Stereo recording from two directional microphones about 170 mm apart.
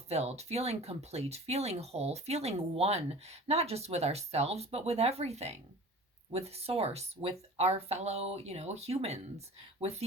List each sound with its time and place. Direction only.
0.1 s speech: 40° right (ahead or behind)